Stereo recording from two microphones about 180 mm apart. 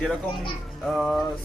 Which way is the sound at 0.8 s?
Centre (ahead or behind).